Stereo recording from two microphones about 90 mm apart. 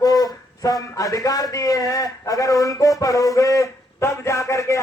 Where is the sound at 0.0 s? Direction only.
45° left (ahead or behind).